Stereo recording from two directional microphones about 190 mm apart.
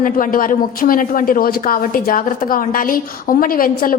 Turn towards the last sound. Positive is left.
turn(degrees=50)  # may be behind; listen again after turning